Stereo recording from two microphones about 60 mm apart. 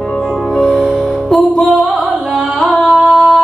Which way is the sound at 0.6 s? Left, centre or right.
Centre.